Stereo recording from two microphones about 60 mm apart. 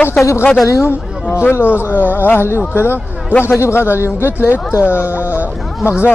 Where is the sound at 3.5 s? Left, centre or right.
Left.